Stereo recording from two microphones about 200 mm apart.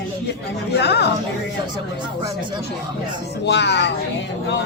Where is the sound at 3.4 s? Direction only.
60° left (ahead or behind).